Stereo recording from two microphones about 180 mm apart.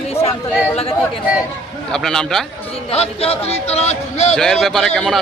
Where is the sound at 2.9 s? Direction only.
35° left (ahead or behind).